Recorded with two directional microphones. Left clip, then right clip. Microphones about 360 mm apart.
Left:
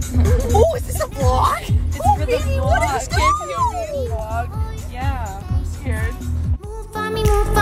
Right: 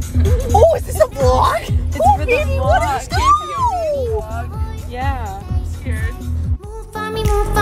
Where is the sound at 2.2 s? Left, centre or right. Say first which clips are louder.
Right 4 dB; centre.